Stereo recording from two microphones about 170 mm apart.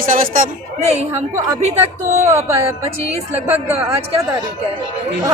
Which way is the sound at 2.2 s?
15° right (ahead or behind).